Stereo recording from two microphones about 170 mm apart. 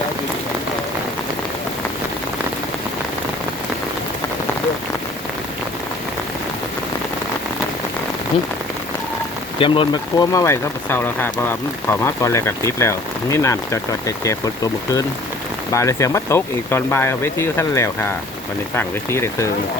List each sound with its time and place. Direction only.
9.6 s speech: 30° left (ahead or behind); by 19.5 s 15° left (ahead or behind)